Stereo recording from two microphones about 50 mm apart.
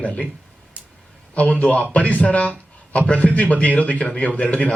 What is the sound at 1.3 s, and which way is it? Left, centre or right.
A man's voice, left.